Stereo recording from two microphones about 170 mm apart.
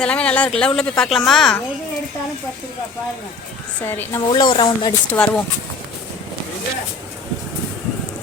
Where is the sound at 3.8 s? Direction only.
10° left (ahead or behind).